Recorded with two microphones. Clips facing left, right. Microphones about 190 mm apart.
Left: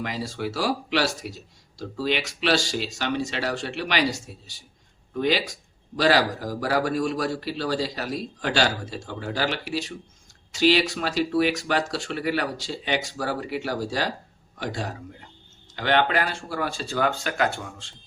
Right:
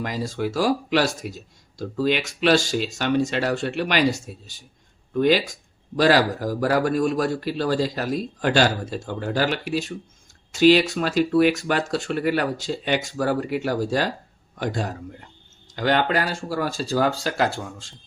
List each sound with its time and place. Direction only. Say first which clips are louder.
0.0 s speech: right 3 dB; 45° right (ahead or behind)
6.0 s speech: right 3 dB; 45° right (ahead or behind)
15.7 s speech: right 1 dB; 40° right (ahead or behind)